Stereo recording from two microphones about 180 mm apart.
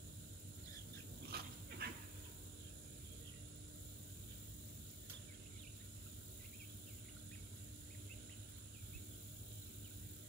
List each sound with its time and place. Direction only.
1.3 s dog: 60° right (ahead or behind)